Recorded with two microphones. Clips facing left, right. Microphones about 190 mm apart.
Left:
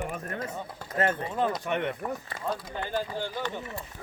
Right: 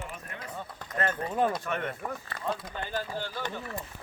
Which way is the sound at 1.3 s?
10° right (ahead or behind).